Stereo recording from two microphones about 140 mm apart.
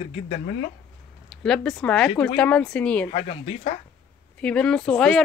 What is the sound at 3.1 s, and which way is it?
Speech, 45° left (ahead or behind).